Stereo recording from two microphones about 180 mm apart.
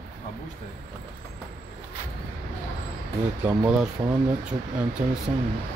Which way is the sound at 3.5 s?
10° right (ahead or behind).